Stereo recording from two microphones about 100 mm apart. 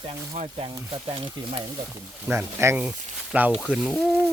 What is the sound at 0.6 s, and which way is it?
Speech, 65° right (ahead or behind).